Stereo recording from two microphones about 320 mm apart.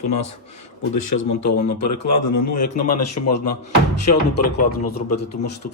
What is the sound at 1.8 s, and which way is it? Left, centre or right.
Speech, left.